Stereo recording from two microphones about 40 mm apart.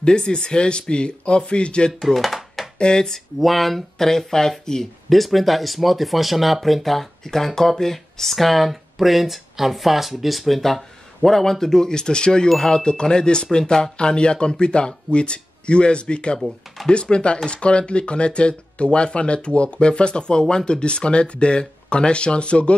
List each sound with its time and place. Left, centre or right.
0.0 s speech: left
2.0 s a sound: centre
2.8 s speech: centre
3.3 s speech: centre
5.1 s speech: centre; by 22.8 s left